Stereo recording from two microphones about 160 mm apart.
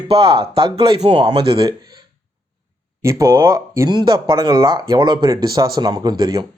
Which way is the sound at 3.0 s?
20° right (ahead or behind).